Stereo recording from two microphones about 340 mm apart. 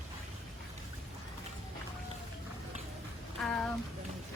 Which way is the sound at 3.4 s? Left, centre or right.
Centre.